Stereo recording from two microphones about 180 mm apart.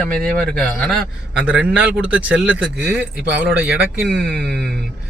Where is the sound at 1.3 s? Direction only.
5° right (ahead or behind).